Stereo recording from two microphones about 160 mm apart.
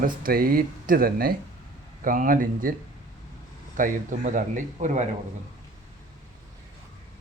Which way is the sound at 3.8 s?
55° right (ahead or behind).